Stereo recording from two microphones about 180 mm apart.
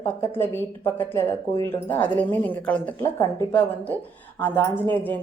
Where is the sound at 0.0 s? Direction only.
15° left (ahead or behind).